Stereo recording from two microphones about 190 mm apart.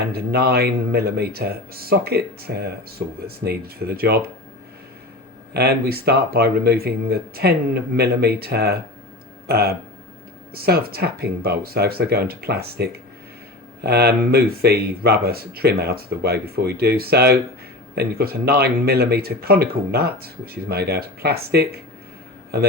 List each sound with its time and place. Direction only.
0.1 s speech: 55° right (ahead or behind)
5.5 s speech: 55° right (ahead or behind)